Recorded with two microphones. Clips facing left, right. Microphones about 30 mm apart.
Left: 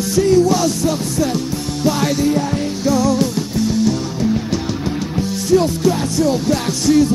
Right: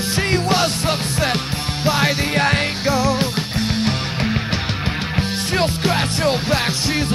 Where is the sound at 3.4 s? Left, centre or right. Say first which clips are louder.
Left 4 dB; right.